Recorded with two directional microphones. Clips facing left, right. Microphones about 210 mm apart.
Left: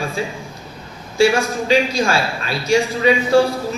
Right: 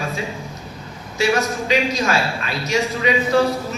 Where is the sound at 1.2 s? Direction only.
30° left (ahead or behind).